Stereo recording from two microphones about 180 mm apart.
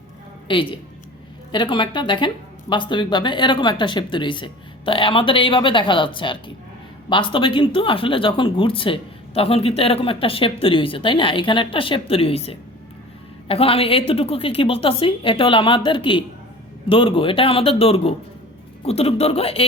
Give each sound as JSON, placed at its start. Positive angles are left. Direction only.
{"t": 0.4, "sound": "a woman's voice", "side_deg": 30}